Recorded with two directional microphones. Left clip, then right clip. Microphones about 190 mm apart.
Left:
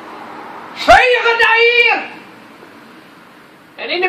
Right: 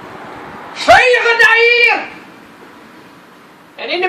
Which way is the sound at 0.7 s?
Centre (ahead or behind).